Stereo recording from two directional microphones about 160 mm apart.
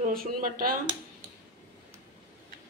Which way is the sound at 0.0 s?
60° right (ahead or behind).